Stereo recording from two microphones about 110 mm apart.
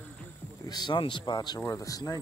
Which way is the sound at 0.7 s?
40° left (ahead or behind).